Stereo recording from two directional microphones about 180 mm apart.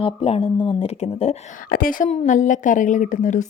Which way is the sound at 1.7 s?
50° left (ahead or behind).